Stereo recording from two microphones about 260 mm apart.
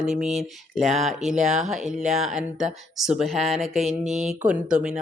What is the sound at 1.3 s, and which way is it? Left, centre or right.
Speech, right.